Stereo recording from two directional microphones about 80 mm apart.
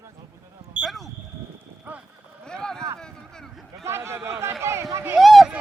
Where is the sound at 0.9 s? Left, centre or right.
Centre.